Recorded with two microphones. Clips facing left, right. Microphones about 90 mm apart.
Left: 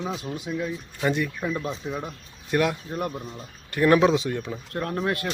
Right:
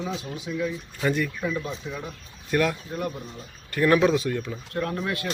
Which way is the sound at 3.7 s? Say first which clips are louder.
Left 1 dB; 20° left (ahead or behind).